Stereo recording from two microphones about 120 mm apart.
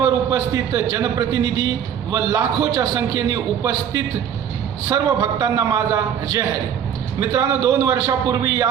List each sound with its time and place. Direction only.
0.0 s a man's voice: 30° right (ahead or behind)